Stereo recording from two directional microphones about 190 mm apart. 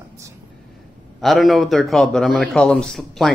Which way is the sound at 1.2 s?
Centre (ahead or behind).